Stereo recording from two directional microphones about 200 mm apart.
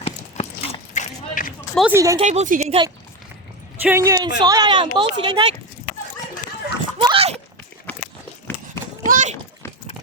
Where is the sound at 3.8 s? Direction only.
15° right (ahead or behind).